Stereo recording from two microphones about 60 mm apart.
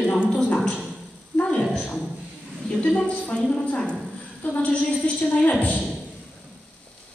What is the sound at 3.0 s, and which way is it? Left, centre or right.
A man's voice, left.